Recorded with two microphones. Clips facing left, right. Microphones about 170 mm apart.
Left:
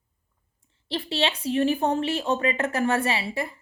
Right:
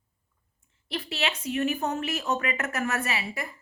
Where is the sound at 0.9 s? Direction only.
30° left (ahead or behind).